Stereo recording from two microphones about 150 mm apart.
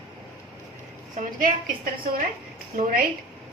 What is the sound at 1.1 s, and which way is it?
Speech, 60° right (ahead or behind).